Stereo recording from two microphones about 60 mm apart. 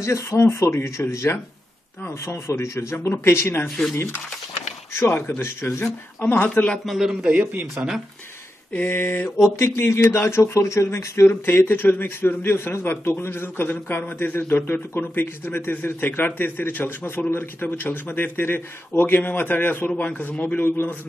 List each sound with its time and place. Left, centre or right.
0.0 s a man's voice: left
3.6 s speech: centre
4.9 s a man's voice: left
6.9 s a man's voice: centre
7.2 s speech: right
8.9 s a man's voice: left
9.6 s speech: left
11.2 s a man's voice: left